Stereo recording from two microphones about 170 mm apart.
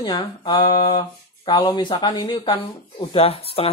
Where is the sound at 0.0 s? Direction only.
25° left (ahead or behind).